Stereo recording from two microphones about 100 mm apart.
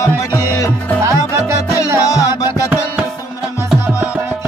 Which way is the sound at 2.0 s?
35° left (ahead or behind).